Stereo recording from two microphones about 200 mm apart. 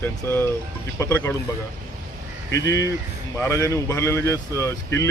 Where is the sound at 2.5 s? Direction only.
15° left (ahead or behind).